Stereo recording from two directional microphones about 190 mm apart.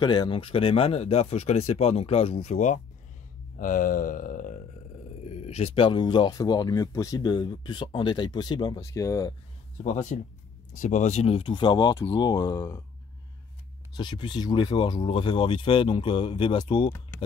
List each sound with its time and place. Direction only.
0.0 s speech: 25° left (ahead or behind)
3.5 s a sound: 45° left (ahead or behind)
5.2 s speech: 35° left (ahead or behind); by 9.3 s 15° left (ahead or behind)
9.9 s speech: 40° left (ahead or behind); by 12.8 s 20° left (ahead or behind)
13.9 s speech: 25° left (ahead or behind)